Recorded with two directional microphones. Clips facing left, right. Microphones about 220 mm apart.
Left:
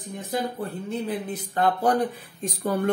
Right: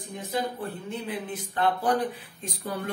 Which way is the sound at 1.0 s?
40° left (ahead or behind).